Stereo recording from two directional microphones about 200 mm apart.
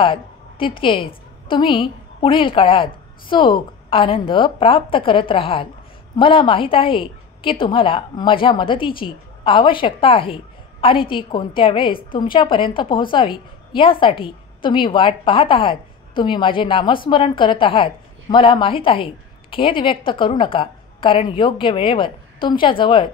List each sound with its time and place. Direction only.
0.0 s a woman's voice: 25° left (ahead or behind)